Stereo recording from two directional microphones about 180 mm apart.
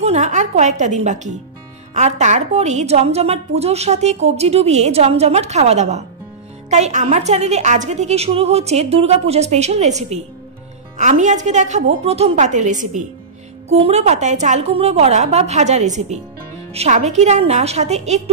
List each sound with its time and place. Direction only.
0.0 s a woman's voice: 40° right (ahead or behind)